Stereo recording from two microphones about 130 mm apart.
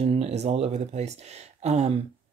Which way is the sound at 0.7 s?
55° right (ahead or behind).